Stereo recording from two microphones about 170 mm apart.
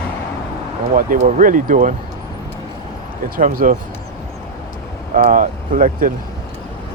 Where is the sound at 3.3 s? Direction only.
55° right (ahead or behind).